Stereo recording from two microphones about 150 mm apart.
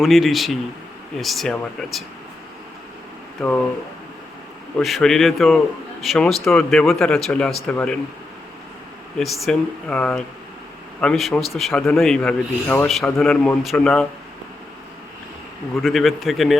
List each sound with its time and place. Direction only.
0.0 s a man's voice: centre (ahead or behind)
3.4 s a man's voice: centre (ahead or behind)
4.8 s a man's voice: centre (ahead or behind)
9.1 s a man's voice: centre (ahead or behind)
15.7 s a man's voice: centre (ahead or behind)